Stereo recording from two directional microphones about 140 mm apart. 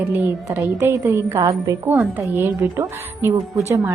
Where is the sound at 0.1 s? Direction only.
15° right (ahead or behind).